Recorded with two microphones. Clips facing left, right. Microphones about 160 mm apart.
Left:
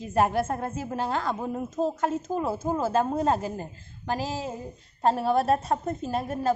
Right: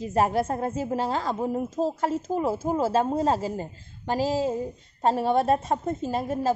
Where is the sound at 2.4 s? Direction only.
25° right (ahead or behind).